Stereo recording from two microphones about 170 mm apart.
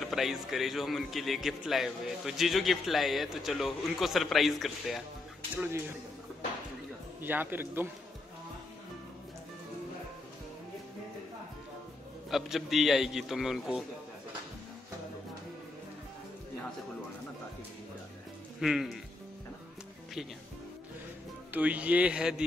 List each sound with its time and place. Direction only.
0.0 s a man's voice: centre (ahead or behind)
7.2 s speech: 10° right (ahead or behind)
12.3 s a man's voice: centre (ahead or behind)
18.6 s a man's voice: centre (ahead or behind)
21.5 s speech: 10° right (ahead or behind)